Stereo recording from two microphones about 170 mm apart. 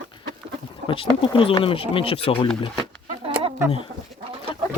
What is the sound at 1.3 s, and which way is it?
Speech, 30° left (ahead or behind).